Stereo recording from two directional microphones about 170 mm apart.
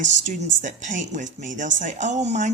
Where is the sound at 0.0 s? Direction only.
45° right (ahead or behind).